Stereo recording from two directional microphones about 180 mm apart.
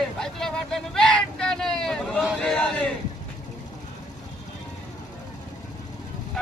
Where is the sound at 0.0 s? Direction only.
5° left (ahead or behind).